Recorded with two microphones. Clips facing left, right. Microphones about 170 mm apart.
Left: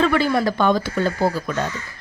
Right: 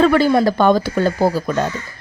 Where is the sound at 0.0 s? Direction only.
40° right (ahead or behind).